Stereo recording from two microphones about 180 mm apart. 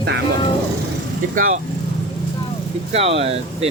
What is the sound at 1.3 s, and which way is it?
Speech, 50° right (ahead or behind).